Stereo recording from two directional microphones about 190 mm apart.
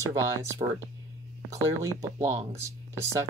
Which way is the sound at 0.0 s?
15° right (ahead or behind).